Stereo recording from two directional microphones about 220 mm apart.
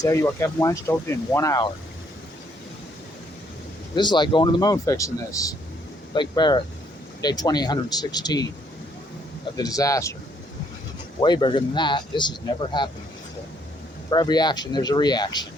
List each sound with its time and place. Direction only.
0.0 s speech: 15° left (ahead or behind)
3.9 s speech: 20° left (ahead or behind)
9.6 s speech: 15° left (ahead or behind)
11.2 s speech: 20° left (ahead or behind)
14.1 s speech: 20° left (ahead or behind)